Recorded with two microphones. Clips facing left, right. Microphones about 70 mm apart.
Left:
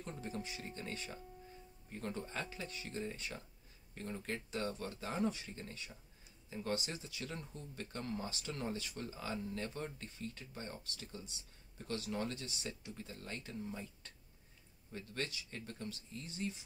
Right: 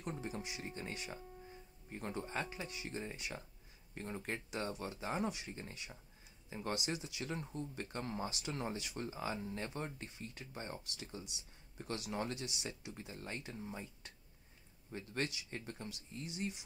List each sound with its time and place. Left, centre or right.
0.0 s speech: centre